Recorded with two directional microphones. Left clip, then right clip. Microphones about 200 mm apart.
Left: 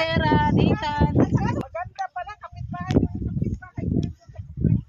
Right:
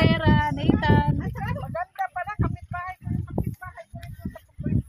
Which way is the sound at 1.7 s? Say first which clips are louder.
Right 1 dB; 5° right (ahead or behind).